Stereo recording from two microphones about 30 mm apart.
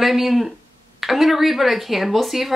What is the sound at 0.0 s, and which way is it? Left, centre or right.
Speech, centre.